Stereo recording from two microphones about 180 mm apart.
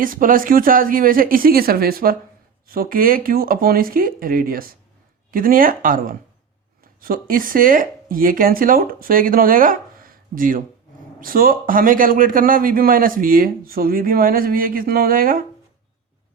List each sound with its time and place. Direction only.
0.0 s a man's voice: 50° right (ahead or behind)